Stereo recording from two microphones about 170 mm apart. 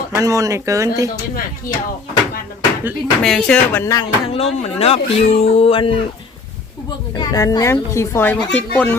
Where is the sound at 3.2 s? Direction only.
5° left (ahead or behind).